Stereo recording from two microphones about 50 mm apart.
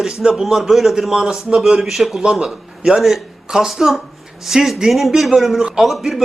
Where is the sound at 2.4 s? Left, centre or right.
Centre.